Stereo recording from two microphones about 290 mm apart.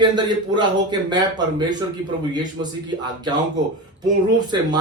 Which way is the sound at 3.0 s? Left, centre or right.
Centre.